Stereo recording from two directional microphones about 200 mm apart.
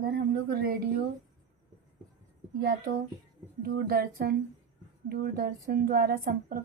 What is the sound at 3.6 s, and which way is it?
A woman's voice, 50° right (ahead or behind).